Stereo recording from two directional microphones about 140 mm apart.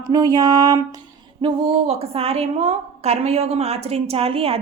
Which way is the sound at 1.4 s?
40° right (ahead or behind).